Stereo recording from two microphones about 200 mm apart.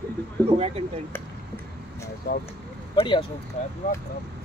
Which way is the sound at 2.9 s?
25° left (ahead or behind).